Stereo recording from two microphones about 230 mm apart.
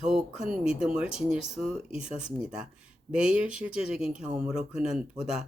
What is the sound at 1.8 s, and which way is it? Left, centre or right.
Speech, left.